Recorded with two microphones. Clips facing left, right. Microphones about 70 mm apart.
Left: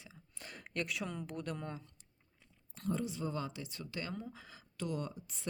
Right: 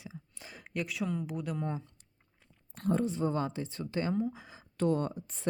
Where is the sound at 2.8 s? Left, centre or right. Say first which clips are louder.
Right 8 dB; right.